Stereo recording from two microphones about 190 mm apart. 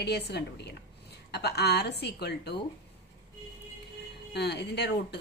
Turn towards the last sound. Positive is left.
turn(degrees=60)  # may be behind; listen again after turning